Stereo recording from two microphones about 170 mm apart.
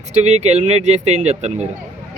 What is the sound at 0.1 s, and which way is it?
Speech, 40° right (ahead or behind).